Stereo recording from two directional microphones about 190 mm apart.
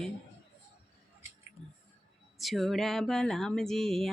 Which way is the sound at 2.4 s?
Centre (ahead or behind).